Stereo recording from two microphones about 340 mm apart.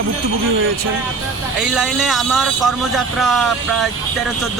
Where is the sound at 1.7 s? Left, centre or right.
Centre.